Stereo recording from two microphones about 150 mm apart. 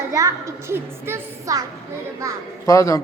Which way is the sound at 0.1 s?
20° right (ahead or behind).